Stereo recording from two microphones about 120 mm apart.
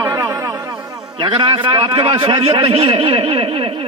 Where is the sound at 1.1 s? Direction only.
45° right (ahead or behind).